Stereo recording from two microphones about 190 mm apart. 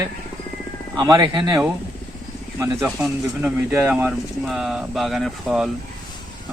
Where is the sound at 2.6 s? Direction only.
10° right (ahead or behind).